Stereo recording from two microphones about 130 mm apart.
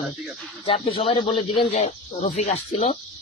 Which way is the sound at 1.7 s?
65° left (ahead or behind).